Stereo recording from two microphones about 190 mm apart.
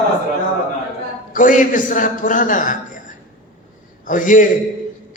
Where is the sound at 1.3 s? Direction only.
45° left (ahead or behind).